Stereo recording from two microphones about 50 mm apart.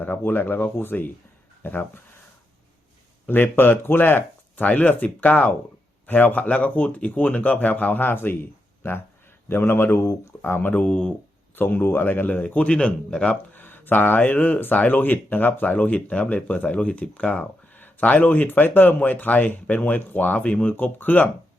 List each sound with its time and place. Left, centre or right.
0.0 s speech: left
3.2 s speech: left
4.6 s speech: left
10.7 s speech: left
11.5 s speech: left
12.5 s speech: left
13.5 s speech: left
15.7 s speech: left